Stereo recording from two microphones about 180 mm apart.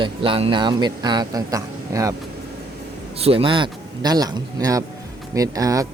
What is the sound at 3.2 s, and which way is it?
Speech, 30° right (ahead or behind).